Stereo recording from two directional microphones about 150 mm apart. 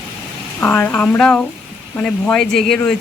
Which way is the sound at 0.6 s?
10° left (ahead or behind).